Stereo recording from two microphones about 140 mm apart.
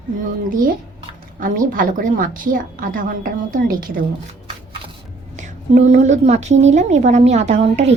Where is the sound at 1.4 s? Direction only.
75° right (ahead or behind).